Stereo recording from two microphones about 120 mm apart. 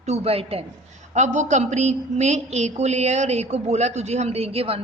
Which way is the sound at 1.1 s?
85° right.